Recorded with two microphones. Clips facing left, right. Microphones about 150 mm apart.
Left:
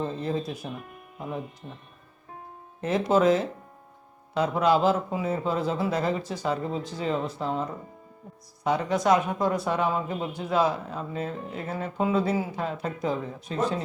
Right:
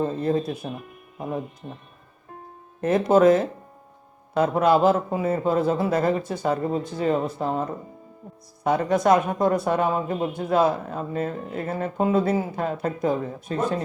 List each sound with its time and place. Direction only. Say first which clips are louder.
0.0 s speech: right 6 dB; 50° right (ahead or behind)
2.8 s speech: right 5 dB; 50° right (ahead or behind)